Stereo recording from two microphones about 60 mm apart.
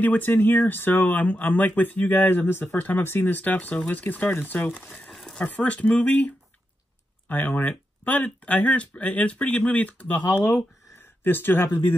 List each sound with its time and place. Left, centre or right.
0.0 s speech: left
5.1 s a sound: centre
5.6 s speech: left
10.3 s speech: left